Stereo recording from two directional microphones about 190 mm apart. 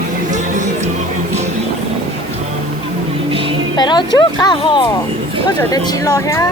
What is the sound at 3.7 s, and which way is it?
Speech, 25° left (ahead or behind).